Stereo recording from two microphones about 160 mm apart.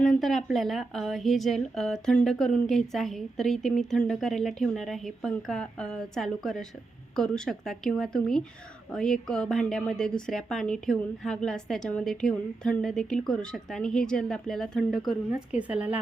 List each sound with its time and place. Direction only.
0.0 s a woman's voice: centre (ahead or behind)